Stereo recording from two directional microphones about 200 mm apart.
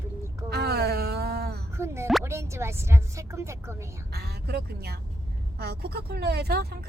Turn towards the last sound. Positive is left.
turn(degrees=-50)  # may be behind; listen again after turning